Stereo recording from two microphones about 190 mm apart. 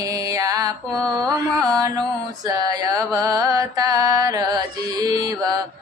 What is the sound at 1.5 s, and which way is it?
Carnatic music, 20° right (ahead or behind).